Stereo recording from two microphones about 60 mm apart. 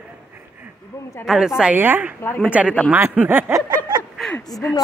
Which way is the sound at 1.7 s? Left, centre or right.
Right.